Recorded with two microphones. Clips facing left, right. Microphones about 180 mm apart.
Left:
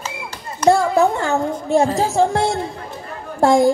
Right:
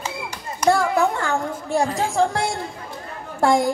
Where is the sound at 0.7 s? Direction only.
25° left (ahead or behind).